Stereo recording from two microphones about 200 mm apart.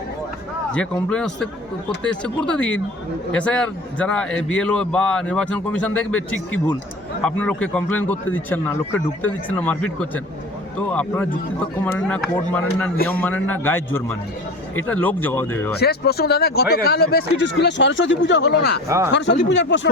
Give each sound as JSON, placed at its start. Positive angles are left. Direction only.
{"t": 1.1, "sound": "a man's voice", "side_deg": 5}
{"t": 11.9, "sound": "a man's voice", "side_deg": 5}
{"t": 15.8, "sound": "speech", "side_deg": 55}
{"t": 18.9, "sound": "speech", "side_deg": -15}
{"t": 19.1, "sound": "speech", "side_deg": 60}